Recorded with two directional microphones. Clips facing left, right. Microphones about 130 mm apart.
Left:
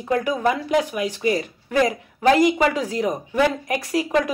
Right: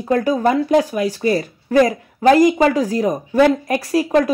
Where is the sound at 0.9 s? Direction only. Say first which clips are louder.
Right 5 dB; 25° left (ahead or behind).